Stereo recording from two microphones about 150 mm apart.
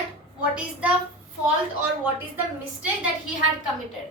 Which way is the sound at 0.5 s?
10° right (ahead or behind).